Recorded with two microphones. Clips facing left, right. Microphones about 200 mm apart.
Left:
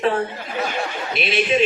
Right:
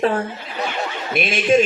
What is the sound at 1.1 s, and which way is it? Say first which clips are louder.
Speech: right 4 dB; 45° right (ahead or behind).